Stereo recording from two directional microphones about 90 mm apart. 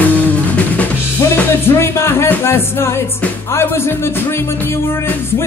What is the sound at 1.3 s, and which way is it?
Music, 25° left (ahead or behind).